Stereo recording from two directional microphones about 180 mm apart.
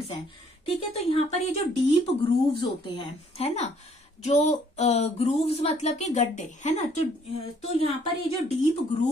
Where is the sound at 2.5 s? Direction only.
25° left (ahead or behind).